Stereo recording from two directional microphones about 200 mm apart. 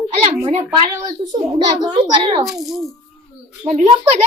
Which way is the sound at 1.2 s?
20° right (ahead or behind).